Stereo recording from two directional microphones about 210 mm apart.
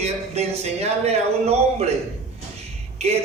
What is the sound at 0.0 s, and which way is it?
A man's voice, 30° right (ahead or behind).